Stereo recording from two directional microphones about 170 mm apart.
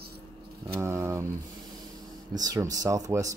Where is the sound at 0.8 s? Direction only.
15° right (ahead or behind).